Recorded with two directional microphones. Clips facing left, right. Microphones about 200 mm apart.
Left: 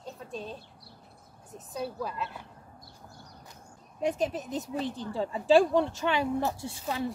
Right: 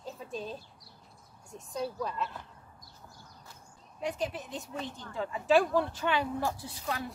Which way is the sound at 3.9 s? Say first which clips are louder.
Left 5 dB; 45° left (ahead or behind).